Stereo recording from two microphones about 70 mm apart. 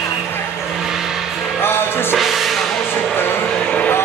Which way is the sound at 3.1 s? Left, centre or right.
Left.